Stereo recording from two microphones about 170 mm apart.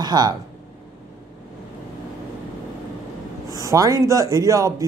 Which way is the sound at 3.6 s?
20° right (ahead or behind).